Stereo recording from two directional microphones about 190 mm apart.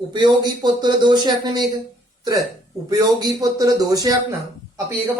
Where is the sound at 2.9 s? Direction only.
20° right (ahead or behind).